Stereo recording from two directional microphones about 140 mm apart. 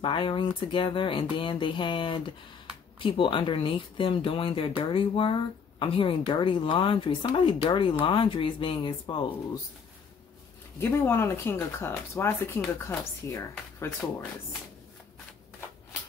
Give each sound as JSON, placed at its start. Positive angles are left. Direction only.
{"t": 0.0, "sound": "speech", "side_deg": 35}
{"t": 10.8, "sound": "speech", "side_deg": 15}